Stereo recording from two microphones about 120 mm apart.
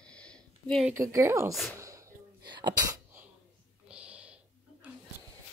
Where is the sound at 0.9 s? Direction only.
25° right (ahead or behind).